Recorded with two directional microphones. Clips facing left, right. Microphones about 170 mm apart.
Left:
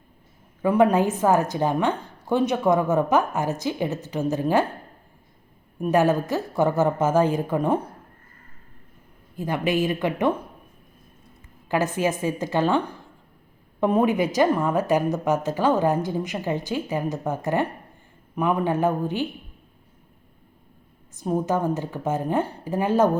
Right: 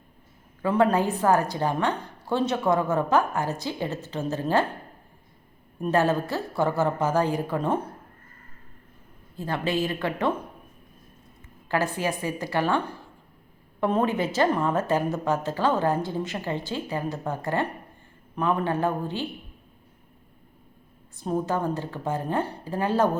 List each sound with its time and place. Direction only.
0.6 s a woman's voice: 15° left (ahead or behind)
5.8 s a woman's voice: 15° left (ahead or behind)
9.3 s a woman's voice: 15° left (ahead or behind)
11.7 s a woman's voice: 20° left (ahead or behind)
21.2 s a woman's voice: 15° left (ahead or behind)